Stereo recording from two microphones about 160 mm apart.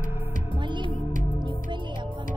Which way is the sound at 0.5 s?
30° right (ahead or behind).